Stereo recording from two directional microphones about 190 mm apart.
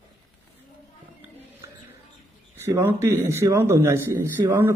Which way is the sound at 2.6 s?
10° right (ahead or behind).